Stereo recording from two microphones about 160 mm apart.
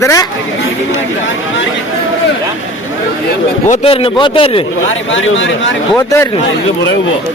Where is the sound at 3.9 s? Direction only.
35° left (ahead or behind).